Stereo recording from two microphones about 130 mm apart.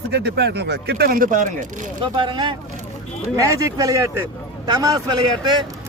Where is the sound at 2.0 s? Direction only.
35° right (ahead or behind).